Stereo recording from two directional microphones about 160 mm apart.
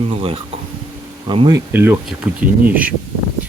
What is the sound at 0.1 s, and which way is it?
Speech, 35° right (ahead or behind).